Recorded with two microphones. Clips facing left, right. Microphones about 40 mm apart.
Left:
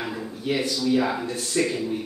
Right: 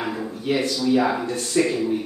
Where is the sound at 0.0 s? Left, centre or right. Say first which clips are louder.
Right 4 dB; centre.